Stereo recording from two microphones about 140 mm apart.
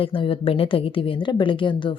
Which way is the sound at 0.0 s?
40° left (ahead or behind).